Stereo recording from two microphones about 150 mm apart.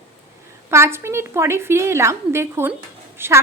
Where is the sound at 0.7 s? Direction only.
15° right (ahead or behind).